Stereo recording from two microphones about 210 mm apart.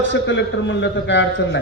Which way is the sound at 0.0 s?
60° left (ahead or behind).